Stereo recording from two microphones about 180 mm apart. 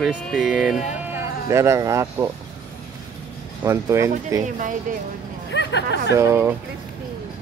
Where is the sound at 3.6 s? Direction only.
15° right (ahead or behind).